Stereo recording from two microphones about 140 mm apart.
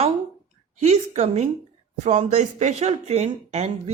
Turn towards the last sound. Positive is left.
turn(degrees=-50)  # may be behind; listen again after turning